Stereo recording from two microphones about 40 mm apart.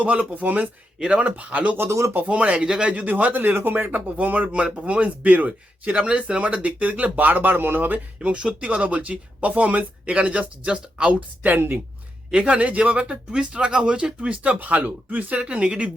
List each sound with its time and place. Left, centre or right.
0.0 s speech: right
0.9 s speech: right
1.2 s speech: right
1.7 s speech: right
2.2 s speech: right
2.6 s speech: centre
2.9 s speech: right
3.5 s speech: right
6.0 s speech: right
7.9 s speech: right
10.1 s speech: right
12.3 s speech: right
15.4 s speech: right